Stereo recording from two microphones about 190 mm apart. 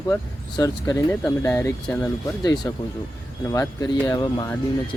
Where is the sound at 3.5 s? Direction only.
15° left (ahead or behind).